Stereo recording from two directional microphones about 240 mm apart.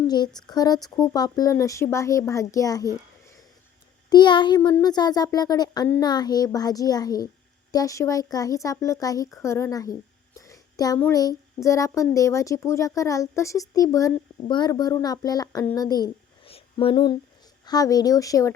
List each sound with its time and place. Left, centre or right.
0.1 s speech: centre
4.1 s speech: centre